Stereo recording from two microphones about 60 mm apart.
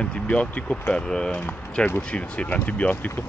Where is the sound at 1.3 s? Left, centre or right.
Left.